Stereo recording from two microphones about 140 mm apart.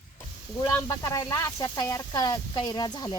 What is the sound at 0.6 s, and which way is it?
Speech, 25° left (ahead or behind).